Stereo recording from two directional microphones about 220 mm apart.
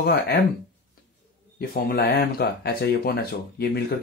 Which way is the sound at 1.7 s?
40° left (ahead or behind).